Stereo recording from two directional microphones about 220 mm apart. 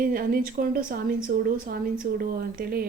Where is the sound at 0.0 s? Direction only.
40° right (ahead or behind).